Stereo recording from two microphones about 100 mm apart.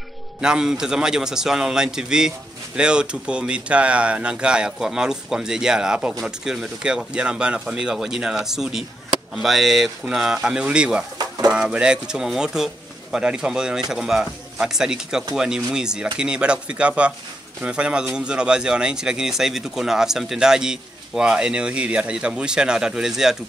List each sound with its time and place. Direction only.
0.4 s a man's voice: 5° right (ahead or behind)
11.1 s pigeon: 40° right (ahead or behind)
11.5 s a man's voice: 10° right (ahead or behind)